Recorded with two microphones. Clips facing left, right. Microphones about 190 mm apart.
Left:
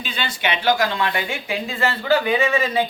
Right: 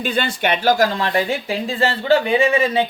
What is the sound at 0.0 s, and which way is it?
Speech, 50° right (ahead or behind).